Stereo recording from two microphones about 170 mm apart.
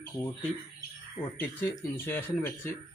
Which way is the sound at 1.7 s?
15° left (ahead or behind).